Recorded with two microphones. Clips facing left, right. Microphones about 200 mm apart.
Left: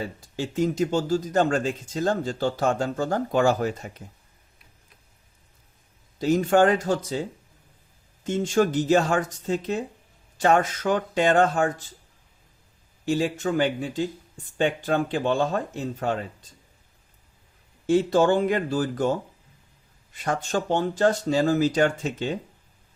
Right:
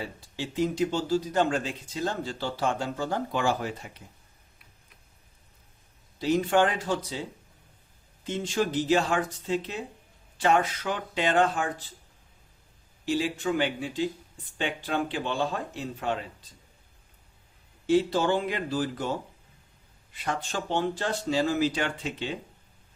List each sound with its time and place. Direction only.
0.3 s speech: 45° left (ahead or behind)
6.1 s speech: 45° left (ahead or behind)
13.1 s speech: 45° left (ahead or behind)
17.8 s speech: 45° left (ahead or behind)
20.1 s speech: 45° left (ahead or behind)